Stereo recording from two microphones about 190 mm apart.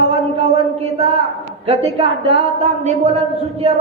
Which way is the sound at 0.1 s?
30° right (ahead or behind).